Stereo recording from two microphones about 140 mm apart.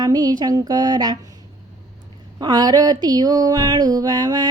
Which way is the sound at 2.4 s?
30° right (ahead or behind).